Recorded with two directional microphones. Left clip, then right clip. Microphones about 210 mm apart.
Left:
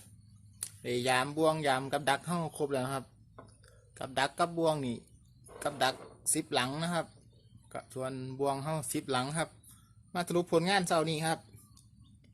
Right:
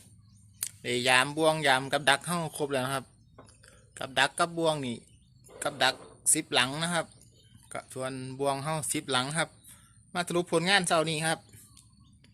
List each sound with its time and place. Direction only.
0.6 s speech: centre (ahead or behind)